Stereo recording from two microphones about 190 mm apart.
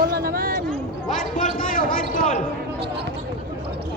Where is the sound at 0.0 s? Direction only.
55° right (ahead or behind).